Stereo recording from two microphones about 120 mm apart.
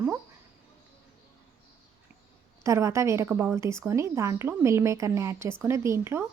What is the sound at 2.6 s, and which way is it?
A woman's voice, 25° right (ahead or behind).